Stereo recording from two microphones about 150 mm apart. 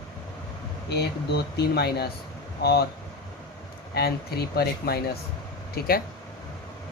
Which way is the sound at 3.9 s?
90° left.